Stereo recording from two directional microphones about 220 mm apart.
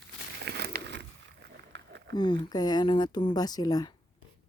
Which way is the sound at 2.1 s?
20° left (ahead or behind).